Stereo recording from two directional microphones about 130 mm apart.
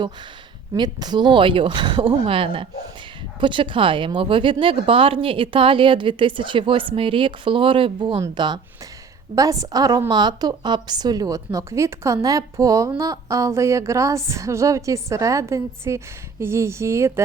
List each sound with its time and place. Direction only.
0.7 s a woman's voice: 30° right (ahead or behind)